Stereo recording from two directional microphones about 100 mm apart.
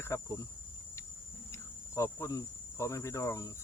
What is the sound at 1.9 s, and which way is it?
Cricket, 30° left (ahead or behind).